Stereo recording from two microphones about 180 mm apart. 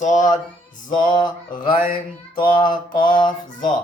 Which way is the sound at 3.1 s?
25° left (ahead or behind).